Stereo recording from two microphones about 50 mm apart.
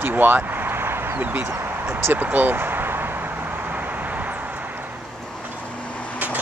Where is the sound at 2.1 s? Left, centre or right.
Right.